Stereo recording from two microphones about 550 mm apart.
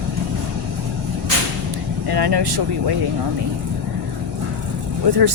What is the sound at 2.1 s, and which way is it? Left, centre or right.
Speech, right.